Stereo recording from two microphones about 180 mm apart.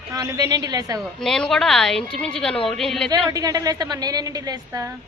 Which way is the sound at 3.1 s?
20° right (ahead or behind).